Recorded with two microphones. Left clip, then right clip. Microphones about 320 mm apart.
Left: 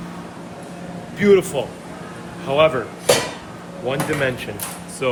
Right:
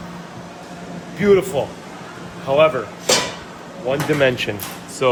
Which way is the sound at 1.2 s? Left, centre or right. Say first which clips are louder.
Even; centre.